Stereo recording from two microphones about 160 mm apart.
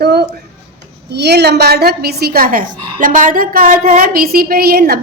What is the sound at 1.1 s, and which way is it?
A woman's voice, 90° right.